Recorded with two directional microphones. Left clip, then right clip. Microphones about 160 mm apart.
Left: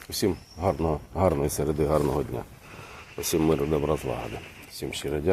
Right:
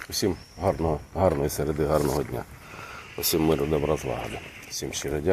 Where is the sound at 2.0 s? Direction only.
Centre (ahead or behind).